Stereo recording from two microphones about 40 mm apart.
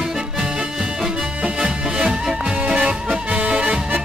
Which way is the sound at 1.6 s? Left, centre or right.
Right.